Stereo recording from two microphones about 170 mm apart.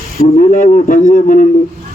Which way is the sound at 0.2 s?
50° left (ahead or behind).